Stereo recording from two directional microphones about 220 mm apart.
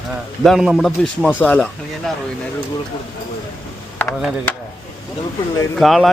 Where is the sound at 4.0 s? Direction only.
5° left (ahead or behind).